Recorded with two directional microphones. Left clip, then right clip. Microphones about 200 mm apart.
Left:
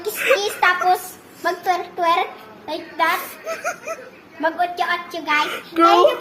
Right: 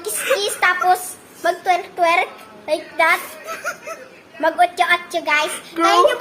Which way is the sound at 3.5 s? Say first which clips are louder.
Left 1 dB; 10° left (ahead or behind).